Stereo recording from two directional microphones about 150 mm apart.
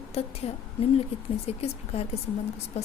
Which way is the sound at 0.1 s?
40° left (ahead or behind).